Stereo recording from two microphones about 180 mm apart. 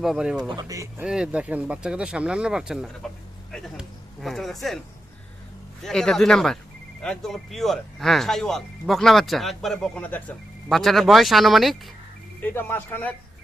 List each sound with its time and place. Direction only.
0.0 s speech: 5° right (ahead or behind)
0.4 s speech: 20° right (ahead or behind)
1.0 s speech: 5° right (ahead or behind)
3.5 s a sound: centre (ahead or behind)
5.8 s speech: 5° left (ahead or behind)
12.4 s speech: 10° left (ahead or behind)